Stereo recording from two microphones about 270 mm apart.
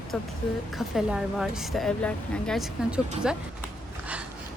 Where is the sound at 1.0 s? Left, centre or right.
Centre.